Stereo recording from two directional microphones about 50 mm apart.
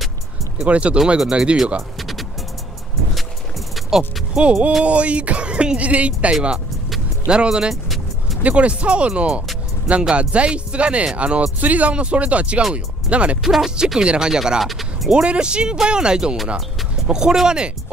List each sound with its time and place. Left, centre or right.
0.6 s speech: right
0.9 s speech: centre
2.0 s music: centre
4.4 s speech: right
7.2 s speech: centre
7.7 s vehicle: centre
8.4 s speech: right
13.4 s speech: centre
14.0 s speech: centre
15.1 s speech: centre